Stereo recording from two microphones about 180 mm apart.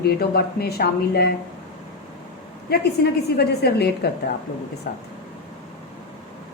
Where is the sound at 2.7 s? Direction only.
60° left (ahead or behind).